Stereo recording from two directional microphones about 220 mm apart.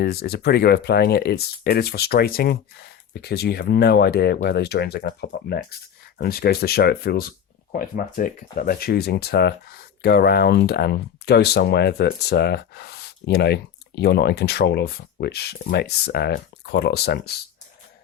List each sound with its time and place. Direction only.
0.0 s speech: 45° left (ahead or behind)